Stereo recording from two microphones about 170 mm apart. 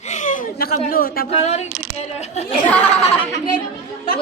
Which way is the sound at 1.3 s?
40° left (ahead or behind).